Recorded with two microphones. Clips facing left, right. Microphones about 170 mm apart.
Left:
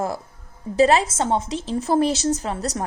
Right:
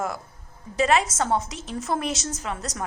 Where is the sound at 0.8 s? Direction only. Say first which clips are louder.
Left 5 dB; 35° left (ahead or behind).